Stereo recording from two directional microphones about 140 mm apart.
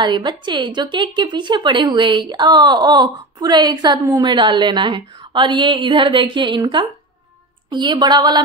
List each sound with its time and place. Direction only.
0.0 s a woman's voice: 30° right (ahead or behind)